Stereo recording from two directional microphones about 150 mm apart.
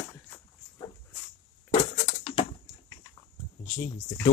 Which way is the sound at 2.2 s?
35° left (ahead or behind).